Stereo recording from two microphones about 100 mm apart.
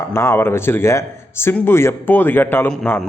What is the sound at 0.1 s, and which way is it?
A man's voice, 25° left (ahead or behind).